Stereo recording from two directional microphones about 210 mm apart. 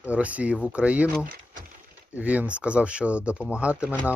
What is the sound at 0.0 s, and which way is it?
Speech, 5° right (ahead or behind).